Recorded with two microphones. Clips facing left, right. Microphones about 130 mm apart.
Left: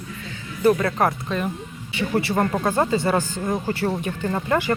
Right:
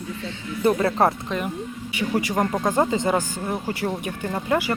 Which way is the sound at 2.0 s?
10° right (ahead or behind).